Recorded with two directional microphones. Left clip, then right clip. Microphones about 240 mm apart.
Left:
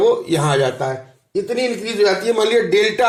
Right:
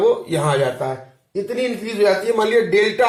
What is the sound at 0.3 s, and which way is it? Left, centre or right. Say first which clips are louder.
Speech: left 1 dB; left.